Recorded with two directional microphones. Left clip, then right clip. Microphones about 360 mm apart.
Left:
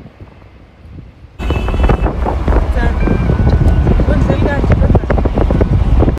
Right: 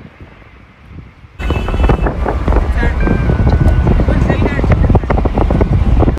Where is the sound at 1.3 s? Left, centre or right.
Centre.